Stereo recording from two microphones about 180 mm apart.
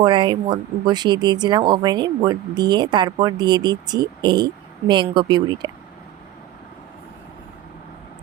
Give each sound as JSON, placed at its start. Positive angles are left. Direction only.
{"t": 0.0, "sound": "speech", "side_deg": -25}